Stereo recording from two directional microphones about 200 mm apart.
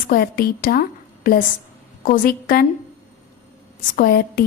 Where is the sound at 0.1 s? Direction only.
50° left (ahead or behind).